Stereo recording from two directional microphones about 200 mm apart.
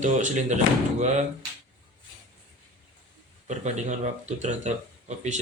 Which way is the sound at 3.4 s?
35° right (ahead or behind).